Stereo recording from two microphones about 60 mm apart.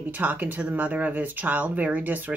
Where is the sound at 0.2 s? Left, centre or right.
Right.